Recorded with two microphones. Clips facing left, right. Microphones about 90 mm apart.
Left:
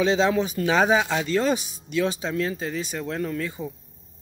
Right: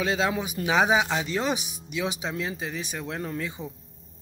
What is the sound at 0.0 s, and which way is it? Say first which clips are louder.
Speech: left 5 dB; 5° right (ahead or behind).